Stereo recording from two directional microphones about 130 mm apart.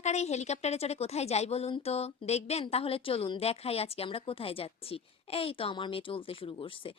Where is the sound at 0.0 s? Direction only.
60° left (ahead or behind).